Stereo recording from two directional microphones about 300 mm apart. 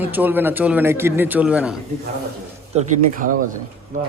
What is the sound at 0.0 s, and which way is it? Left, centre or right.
Speech, centre.